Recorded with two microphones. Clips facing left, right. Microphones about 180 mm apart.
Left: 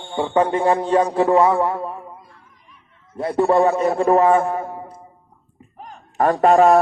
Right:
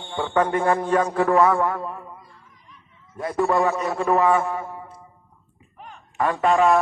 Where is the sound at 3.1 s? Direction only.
30° left (ahead or behind).